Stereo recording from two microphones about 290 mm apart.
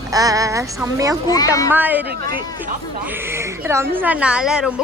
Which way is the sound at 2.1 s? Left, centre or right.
Right.